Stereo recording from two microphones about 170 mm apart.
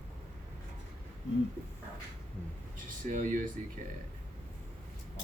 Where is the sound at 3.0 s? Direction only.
50° right (ahead or behind).